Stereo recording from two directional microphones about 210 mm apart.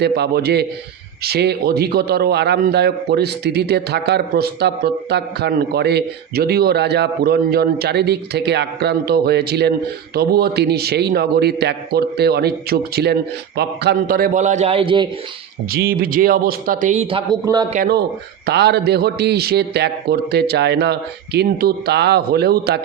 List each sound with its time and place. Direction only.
0.0 s a man's voice: 50° right (ahead or behind); by 15.1 s 25° right (ahead or behind)
15.7 s a man's voice: 45° right (ahead or behind); by 17.7 s 20° right (ahead or behind)
17.7 s a man's voice: 40° right (ahead or behind)